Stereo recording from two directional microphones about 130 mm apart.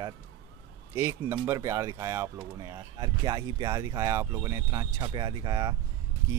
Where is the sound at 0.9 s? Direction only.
20° right (ahead or behind).